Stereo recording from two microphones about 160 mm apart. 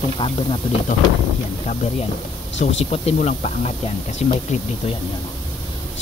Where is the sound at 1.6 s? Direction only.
45° left (ahead or behind).